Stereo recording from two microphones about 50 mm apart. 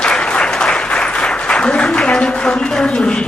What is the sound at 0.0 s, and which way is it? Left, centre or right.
Applause, centre.